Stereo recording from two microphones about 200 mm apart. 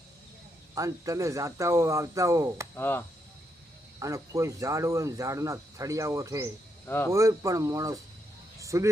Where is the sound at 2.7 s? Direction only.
10° left (ahead or behind).